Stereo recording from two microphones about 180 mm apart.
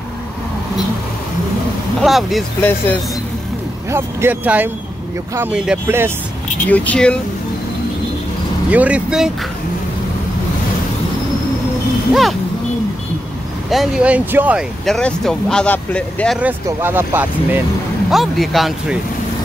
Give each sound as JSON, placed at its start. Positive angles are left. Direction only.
{"t": 2.0, "sound": "speech", "side_deg": 0}
{"t": 3.9, "sound": "speech", "side_deg": -10}
{"t": 6.7, "sound": "speech", "side_deg": 10}
{"t": 8.6, "sound": "speech", "side_deg": -5}
{"t": 12.1, "sound": "speech", "side_deg": 0}
{"t": 13.7, "sound": "speech", "side_deg": 0}
{"t": 14.9, "sound": "speech", "side_deg": 5}
{"t": 16.3, "sound": "speech", "side_deg": -10}
{"t": 18.1, "sound": "speech", "side_deg": 0}